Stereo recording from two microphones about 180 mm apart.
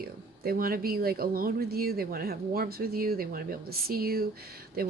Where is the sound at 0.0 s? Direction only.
55° right (ahead or behind).